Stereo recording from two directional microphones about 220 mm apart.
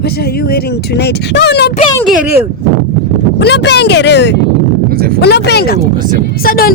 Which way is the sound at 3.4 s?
50° left (ahead or behind).